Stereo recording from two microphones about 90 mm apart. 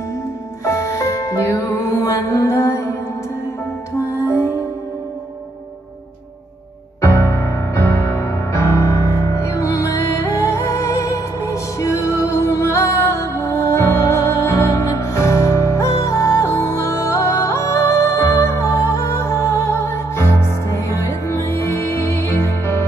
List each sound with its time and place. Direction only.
0.7 s music: 35° left (ahead or behind)
7.0 s music: 30° left (ahead or behind)